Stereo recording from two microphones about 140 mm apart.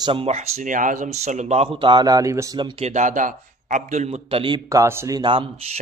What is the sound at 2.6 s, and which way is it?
Speech, 35° right (ahead or behind).